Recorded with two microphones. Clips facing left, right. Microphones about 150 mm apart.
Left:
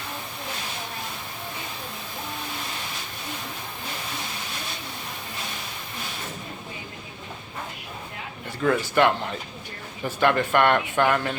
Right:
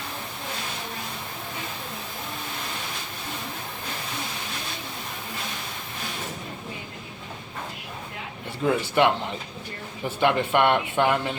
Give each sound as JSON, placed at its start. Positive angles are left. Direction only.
{"t": 8.6, "sound": "a man's voice", "side_deg": -15}
{"t": 10.2, "sound": "speech", "side_deg": -20}